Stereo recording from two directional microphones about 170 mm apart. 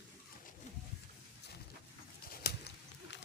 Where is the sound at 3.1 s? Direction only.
90° left.